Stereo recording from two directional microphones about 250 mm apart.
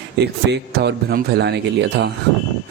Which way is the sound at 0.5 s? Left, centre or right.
Right.